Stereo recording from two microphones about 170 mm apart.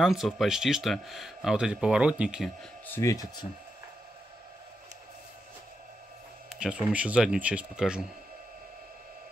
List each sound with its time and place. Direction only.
0.0 s speech: centre (ahead or behind)
2.9 s speech: 20° left (ahead or behind)
6.9 s speech: 5° right (ahead or behind)